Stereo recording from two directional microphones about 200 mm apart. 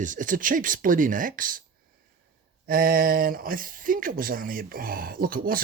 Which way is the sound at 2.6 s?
45° right (ahead or behind).